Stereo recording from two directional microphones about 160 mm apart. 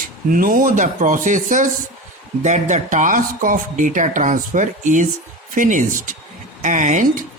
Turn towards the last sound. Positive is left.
turn(degrees=-50)  # may be behind; listen again after turning